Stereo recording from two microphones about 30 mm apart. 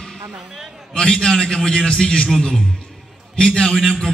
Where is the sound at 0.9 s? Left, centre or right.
Left.